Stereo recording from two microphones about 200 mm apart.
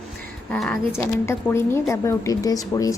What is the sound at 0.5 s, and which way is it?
Speech, 5° left (ahead or behind).